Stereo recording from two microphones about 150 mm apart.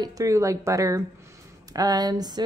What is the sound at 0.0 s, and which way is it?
Speech, 20° right (ahead or behind).